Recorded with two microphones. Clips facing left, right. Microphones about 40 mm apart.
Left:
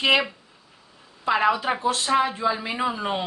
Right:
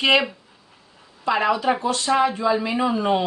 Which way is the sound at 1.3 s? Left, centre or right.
Centre.